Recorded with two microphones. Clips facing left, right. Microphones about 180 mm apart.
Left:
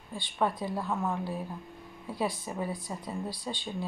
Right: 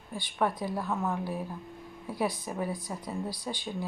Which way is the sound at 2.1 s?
15° right (ahead or behind).